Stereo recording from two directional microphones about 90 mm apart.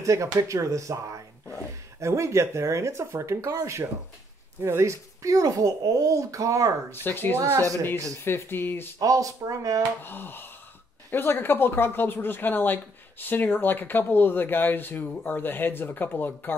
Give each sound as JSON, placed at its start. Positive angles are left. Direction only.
{"t": 0.0, "sound": "speech", "side_deg": -35}
{"t": 6.9, "sound": "speech", "side_deg": 25}
{"t": 7.5, "sound": "speech", "side_deg": -40}
{"t": 8.2, "sound": "speech", "side_deg": 25}
{"t": 9.0, "sound": "speech", "side_deg": -40}
{"t": 10.0, "sound": "speech", "side_deg": 20}